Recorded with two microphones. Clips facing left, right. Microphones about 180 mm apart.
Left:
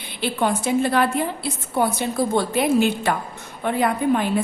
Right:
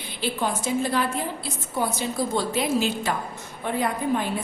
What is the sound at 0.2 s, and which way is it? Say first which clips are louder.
A woman's voice: left 4 dB; 65° left (ahead or behind).